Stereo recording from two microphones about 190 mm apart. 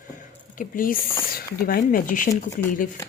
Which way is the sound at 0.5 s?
45° left (ahead or behind).